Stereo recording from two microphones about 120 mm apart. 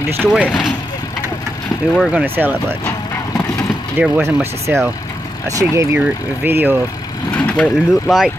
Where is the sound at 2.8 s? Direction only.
25° left (ahead or behind).